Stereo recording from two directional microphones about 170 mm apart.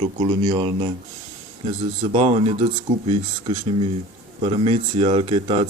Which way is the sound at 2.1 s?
40° right (ahead or behind).